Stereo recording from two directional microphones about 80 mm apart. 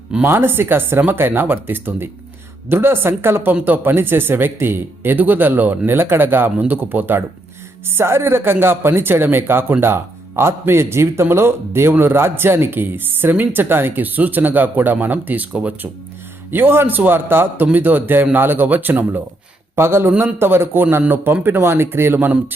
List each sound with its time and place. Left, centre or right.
0.2 s speech: right